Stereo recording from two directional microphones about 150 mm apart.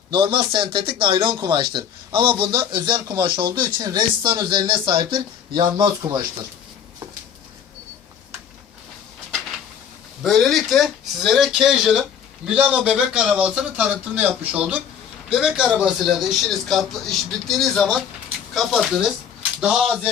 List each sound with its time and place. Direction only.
0.1 s a man's voice: 35° right (ahead or behind)
10.2 s a man's voice: centre (ahead or behind)